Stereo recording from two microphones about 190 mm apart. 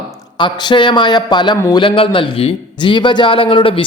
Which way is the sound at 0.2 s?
25° left (ahead or behind).